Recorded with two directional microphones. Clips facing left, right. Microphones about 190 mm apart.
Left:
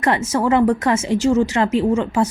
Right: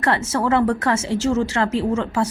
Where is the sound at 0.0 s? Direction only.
15° left (ahead or behind).